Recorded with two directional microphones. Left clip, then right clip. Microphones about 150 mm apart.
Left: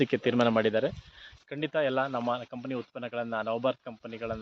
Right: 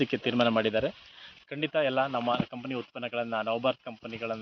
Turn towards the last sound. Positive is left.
turn(degrees=25)  # may be behind; listen again after turning